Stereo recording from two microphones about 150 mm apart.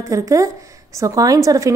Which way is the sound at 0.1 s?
20° right (ahead or behind).